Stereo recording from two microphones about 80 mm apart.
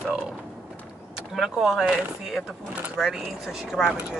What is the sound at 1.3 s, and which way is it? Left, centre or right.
Speech, centre.